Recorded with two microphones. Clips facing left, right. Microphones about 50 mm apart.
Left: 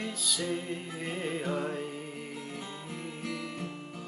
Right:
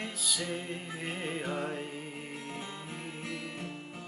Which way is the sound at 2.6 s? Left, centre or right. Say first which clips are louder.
Left 1 dB; right.